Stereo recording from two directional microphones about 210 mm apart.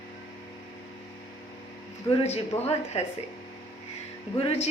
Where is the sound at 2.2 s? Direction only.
30° left (ahead or behind).